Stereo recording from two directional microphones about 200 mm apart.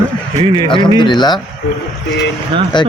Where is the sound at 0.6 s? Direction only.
25° left (ahead or behind).